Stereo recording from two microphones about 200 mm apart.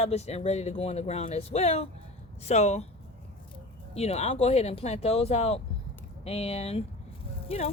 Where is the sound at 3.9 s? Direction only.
30° left (ahead or behind).